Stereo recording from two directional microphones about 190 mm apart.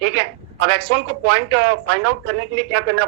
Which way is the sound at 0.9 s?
65° right (ahead or behind).